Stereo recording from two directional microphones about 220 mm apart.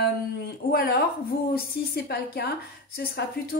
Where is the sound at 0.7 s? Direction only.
45° left (ahead or behind).